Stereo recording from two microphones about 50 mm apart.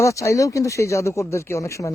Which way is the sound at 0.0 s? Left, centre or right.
Left.